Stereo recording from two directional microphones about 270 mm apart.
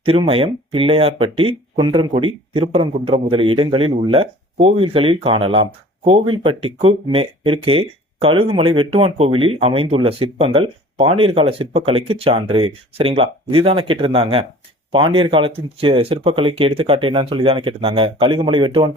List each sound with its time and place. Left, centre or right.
0.0 s speech: centre